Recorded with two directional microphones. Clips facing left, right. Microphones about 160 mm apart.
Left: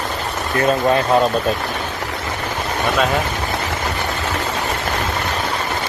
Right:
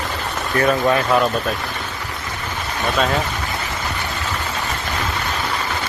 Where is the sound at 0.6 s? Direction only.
25° left (ahead or behind).